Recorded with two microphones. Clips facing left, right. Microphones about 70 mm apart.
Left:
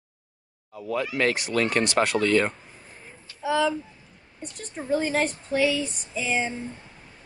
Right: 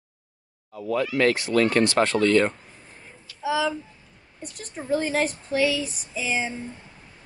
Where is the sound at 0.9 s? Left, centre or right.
Left.